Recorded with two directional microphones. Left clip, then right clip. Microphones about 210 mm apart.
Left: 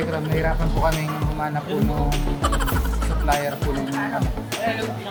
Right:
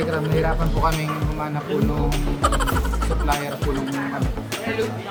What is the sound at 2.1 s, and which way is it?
Speech, centre (ahead or behind).